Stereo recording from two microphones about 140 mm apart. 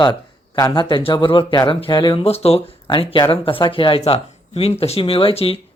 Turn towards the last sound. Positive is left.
turn(degrees=40)  # may be behind; listen again after turning